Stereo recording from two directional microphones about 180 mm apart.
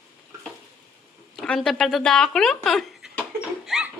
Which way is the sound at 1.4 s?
Centre (ahead or behind).